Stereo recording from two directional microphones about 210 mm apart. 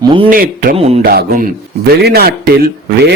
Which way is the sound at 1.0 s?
50° right (ahead or behind).